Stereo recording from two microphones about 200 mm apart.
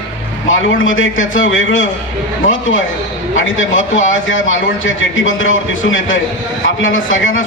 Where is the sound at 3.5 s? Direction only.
75° left (ahead or behind).